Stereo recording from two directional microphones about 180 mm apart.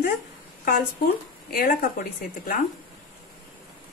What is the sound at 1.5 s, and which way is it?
Speech, 55° left (ahead or behind).